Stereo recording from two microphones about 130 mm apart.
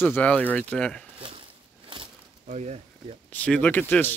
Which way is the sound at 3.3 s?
10° left (ahead or behind).